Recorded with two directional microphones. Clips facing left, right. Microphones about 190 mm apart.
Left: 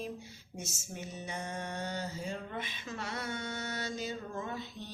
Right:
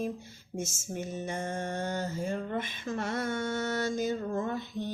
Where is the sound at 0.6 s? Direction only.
50° right (ahead or behind).